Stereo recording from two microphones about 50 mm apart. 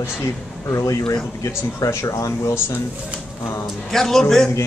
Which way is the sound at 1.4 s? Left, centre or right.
Left.